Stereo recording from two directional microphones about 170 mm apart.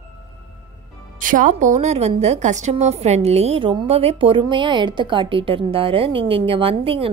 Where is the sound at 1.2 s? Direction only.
50° right (ahead or behind).